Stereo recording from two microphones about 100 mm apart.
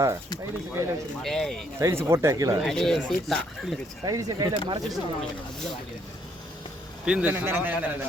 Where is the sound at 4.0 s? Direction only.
40° right (ahead or behind).